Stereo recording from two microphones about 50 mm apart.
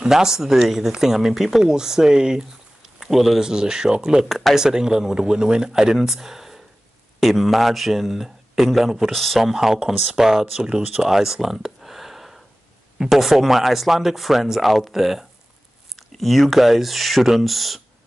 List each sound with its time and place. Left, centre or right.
0.0 s speech: centre
3.0 s speech: centre
9.4 s speech: centre